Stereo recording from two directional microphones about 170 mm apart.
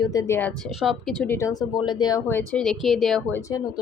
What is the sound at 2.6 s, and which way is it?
Speech, centre (ahead or behind).